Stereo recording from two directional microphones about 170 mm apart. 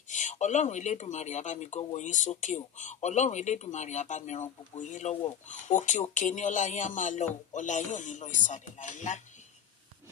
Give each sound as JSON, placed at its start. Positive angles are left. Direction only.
{"t": 0.1, "sound": "speech", "side_deg": 45}